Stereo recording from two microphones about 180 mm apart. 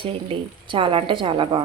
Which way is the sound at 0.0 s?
30° right (ahead or behind).